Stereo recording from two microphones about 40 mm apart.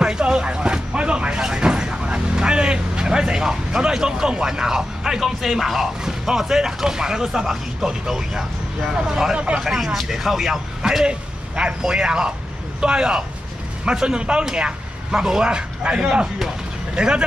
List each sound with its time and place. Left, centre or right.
0.0 s vehicle: right
7.8 s speech: centre
9.6 s speech: centre
11.1 s a man's voice: right